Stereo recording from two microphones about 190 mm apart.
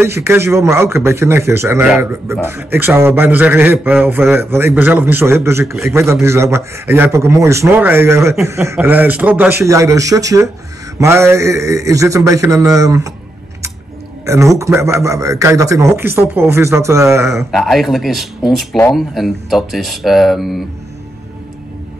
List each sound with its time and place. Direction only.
0.0 s speech: 15° right (ahead or behind)
14.2 s speech: 15° right (ahead or behind)
17.5 s speech: centre (ahead or behind)